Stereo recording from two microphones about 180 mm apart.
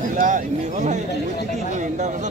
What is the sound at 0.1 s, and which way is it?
Speech, 45° right (ahead or behind).